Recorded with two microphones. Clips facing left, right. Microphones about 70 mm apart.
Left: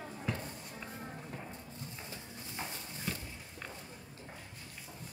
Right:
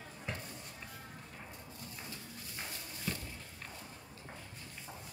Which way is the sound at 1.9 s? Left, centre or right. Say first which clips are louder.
Left 1 dB; left.